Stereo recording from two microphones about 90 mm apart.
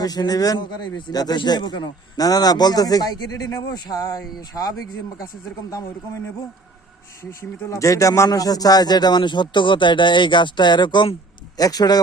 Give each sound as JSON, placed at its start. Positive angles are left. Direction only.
{"t": 0.0, "sound": "a man's voice", "side_deg": 45}
{"t": 7.3, "sound": "speech", "side_deg": 35}
{"t": 11.5, "sound": "a man's voice", "side_deg": 45}